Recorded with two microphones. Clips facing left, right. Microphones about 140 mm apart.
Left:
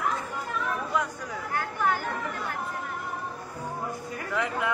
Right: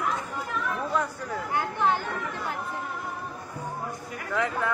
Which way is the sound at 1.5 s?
20° right (ahead or behind).